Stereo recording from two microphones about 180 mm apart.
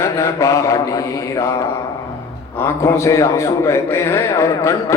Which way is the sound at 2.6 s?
15° left (ahead or behind).